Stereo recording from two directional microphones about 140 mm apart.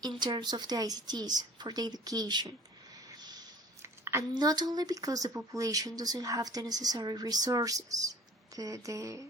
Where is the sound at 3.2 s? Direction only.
30° right (ahead or behind).